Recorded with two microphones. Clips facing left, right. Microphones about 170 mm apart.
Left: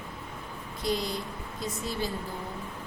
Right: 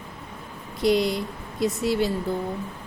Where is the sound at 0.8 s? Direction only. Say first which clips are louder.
Right 9 dB; 85° right.